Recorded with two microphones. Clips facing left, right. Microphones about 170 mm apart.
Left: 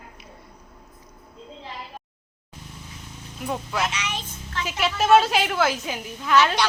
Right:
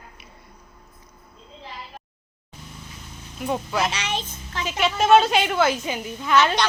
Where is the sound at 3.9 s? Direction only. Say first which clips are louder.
Right 3 dB; 30° right (ahead or behind).